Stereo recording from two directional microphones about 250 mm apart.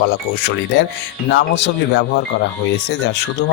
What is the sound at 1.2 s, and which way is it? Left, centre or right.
Speech, left.